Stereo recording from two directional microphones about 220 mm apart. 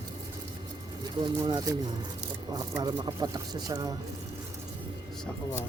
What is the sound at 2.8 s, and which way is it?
Speech, 15° right (ahead or behind).